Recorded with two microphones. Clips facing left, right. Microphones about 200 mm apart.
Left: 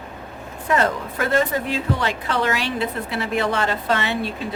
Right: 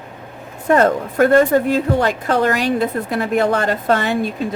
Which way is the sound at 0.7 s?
45° right (ahead or behind).